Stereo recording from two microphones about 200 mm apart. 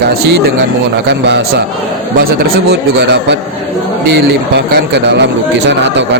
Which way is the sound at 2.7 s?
60° right (ahead or behind).